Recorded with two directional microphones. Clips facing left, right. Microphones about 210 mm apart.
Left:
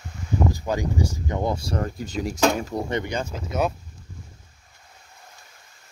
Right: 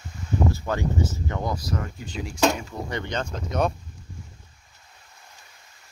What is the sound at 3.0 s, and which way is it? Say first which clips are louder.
Speech: left 1 dB; 10° left (ahead or behind).